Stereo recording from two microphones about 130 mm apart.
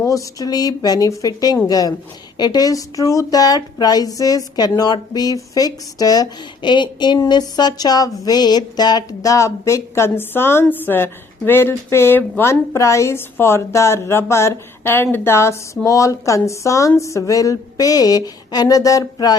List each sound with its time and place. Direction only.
0.0 s a woman's voice: 25° left (ahead or behind)